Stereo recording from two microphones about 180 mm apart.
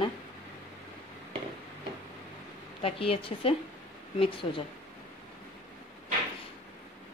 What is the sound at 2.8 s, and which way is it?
A woman's voice, 30° left (ahead or behind).